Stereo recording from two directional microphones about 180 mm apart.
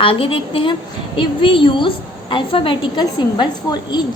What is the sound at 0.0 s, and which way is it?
A woman's voice, 30° left (ahead or behind).